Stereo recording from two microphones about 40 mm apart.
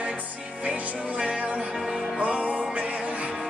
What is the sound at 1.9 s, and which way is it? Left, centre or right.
Music, right.